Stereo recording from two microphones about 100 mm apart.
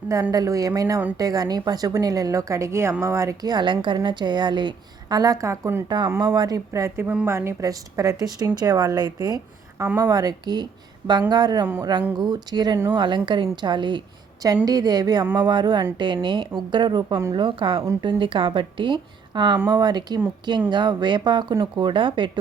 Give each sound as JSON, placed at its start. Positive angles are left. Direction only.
{"t": 0.1, "sound": "speech", "side_deg": -35}
{"t": 3.4, "sound": "a woman's voice", "side_deg": -50}
{"t": 6.2, "sound": "speech", "side_deg": -40}
{"t": 11.6, "sound": "speech", "side_deg": -20}
{"t": 12.2, "sound": "a woman's voice", "side_deg": -45}
{"t": 14.4, "sound": "a woman's voice", "side_deg": -40}